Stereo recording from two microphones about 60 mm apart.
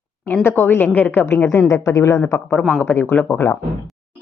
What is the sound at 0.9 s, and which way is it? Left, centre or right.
Speech, left.